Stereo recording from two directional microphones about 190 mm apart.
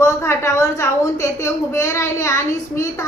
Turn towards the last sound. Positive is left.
turn(degrees=15)  # may be behind; listen again after turning